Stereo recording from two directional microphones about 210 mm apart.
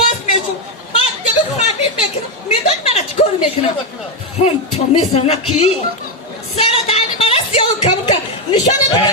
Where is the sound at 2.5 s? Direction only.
30° left (ahead or behind).